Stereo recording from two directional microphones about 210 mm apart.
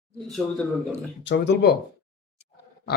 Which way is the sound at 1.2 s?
55° left (ahead or behind).